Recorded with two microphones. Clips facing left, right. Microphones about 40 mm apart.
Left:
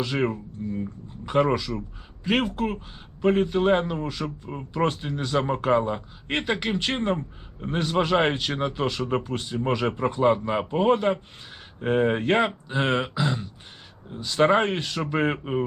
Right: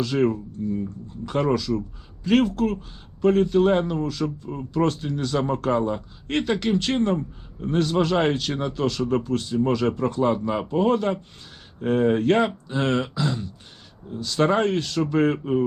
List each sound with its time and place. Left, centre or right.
0.0 s speech: left